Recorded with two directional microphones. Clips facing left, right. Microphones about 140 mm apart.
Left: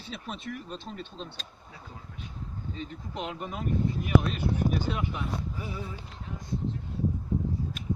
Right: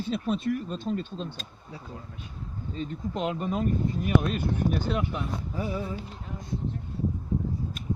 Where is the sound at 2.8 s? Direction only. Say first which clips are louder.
Right 7 dB; 40° right (ahead or behind).